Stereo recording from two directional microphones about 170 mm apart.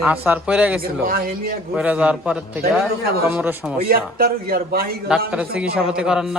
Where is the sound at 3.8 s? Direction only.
65° right (ahead or behind).